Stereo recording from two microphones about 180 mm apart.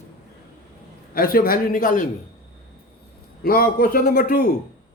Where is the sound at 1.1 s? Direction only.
55° left (ahead or behind).